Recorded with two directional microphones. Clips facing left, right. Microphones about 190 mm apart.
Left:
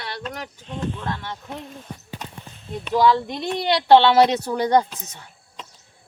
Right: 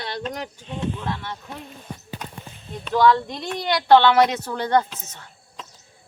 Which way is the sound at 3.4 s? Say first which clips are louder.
Left 3 dB; 25° left (ahead or behind).